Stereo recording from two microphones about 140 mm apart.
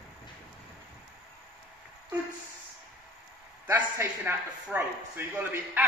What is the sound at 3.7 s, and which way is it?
A man's voice, 15° right (ahead or behind).